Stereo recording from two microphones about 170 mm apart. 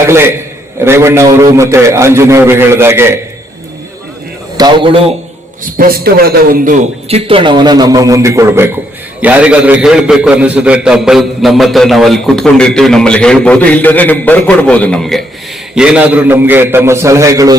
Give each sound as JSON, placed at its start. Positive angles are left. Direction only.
{"t": 0.0, "sound": "a man's voice", "side_deg": -15}
{"t": 4.5, "sound": "a man's voice", "side_deg": -25}
{"t": 5.7, "sound": "a man's voice", "side_deg": -60}
{"t": 7.1, "sound": "a man's voice", "side_deg": -30}